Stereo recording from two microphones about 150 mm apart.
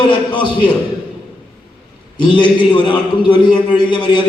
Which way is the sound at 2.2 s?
30° left (ahead or behind).